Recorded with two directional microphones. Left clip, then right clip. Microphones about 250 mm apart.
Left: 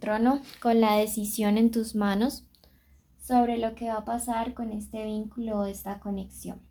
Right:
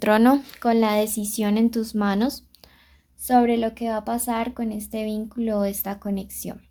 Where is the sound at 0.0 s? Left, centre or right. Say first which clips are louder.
Right 8 dB; right; by 2.6 s centre.